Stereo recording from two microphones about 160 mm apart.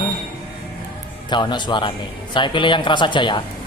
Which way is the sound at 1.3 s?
30° left (ahead or behind).